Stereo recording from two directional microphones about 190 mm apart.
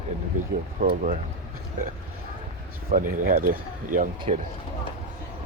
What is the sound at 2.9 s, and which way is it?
Speech, 45° right (ahead or behind).